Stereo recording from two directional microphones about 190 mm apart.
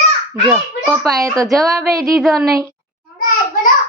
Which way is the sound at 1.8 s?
15° right (ahead or behind).